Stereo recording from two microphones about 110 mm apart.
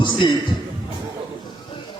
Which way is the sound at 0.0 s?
45° left (ahead or behind).